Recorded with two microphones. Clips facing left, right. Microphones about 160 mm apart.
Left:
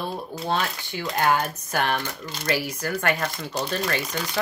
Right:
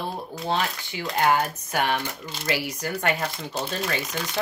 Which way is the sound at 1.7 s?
15° right (ahead or behind).